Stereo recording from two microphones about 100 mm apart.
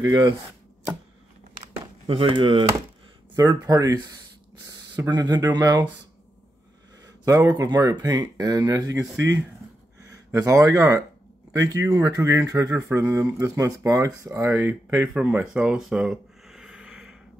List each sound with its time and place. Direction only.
0.0 s speech: 40° right (ahead or behind)
2.0 s speech: 60° right (ahead or behind)
3.3 s speech: 40° right (ahead or behind)
7.2 s speech: 35° right (ahead or behind)
10.3 s speech: 35° right (ahead or behind)
15.5 s gasp: 10° right (ahead or behind)